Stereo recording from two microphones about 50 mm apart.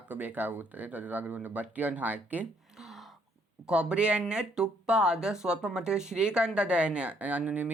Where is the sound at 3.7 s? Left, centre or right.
Right.